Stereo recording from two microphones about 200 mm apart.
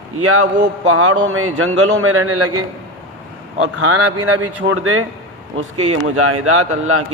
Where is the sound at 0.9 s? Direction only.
90° right.